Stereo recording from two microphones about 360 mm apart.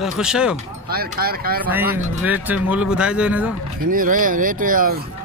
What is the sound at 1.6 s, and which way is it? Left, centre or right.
Speech, centre.